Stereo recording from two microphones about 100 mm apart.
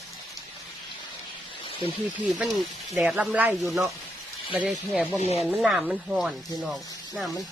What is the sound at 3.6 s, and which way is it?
Speech, centre (ahead or behind).